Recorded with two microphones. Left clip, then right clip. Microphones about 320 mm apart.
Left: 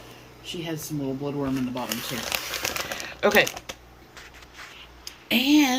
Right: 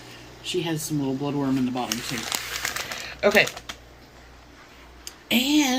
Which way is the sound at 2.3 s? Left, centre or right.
Left.